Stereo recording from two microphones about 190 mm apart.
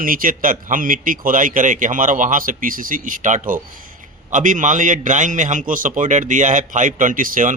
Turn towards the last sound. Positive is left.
turn(degrees=-45)  # may be behind; listen again after turning